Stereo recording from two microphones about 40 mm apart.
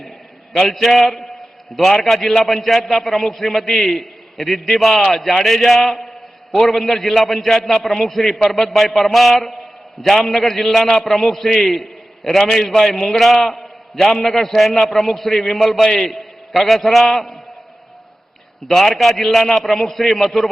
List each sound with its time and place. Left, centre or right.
0.5 s a man's voice: centre
18.9 s a man's voice: centre